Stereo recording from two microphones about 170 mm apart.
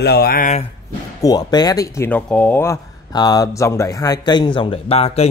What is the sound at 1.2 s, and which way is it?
A man's voice, 20° left (ahead or behind).